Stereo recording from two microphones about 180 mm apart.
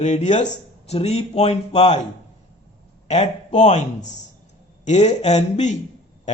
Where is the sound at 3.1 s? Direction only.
35° left (ahead or behind).